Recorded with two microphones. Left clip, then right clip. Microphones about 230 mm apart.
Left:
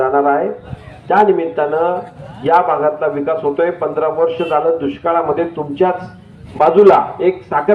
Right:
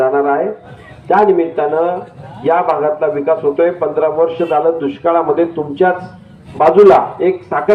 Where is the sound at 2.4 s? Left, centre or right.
Left.